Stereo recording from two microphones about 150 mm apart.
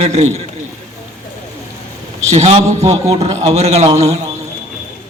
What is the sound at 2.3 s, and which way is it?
A man's voice, 45° right (ahead or behind).